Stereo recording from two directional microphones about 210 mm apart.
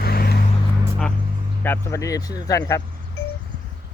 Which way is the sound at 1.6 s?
10° left (ahead or behind).